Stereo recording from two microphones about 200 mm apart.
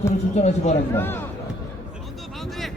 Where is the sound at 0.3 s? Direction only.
35° left (ahead or behind).